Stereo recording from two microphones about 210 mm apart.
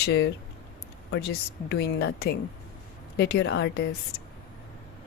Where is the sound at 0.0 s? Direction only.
50° left (ahead or behind).